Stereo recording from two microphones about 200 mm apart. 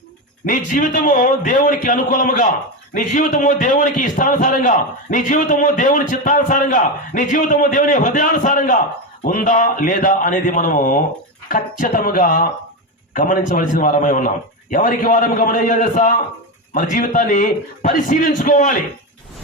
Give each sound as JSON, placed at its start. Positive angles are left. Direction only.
{"t": 0.4, "sound": "a man's voice", "side_deg": 40}